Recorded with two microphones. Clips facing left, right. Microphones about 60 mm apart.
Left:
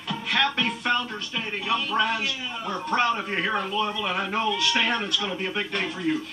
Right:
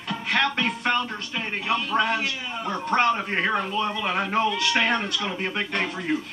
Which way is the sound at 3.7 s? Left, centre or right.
Right.